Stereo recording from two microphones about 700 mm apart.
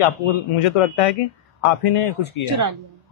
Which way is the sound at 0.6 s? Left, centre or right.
Left.